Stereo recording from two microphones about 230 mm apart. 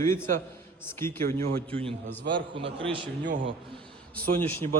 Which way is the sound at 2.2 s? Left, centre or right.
Right.